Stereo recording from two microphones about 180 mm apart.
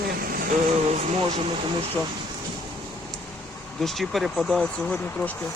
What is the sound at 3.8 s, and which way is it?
Speech, centre (ahead or behind).